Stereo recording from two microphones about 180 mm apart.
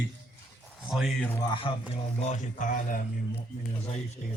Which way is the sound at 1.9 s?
40° left (ahead or behind).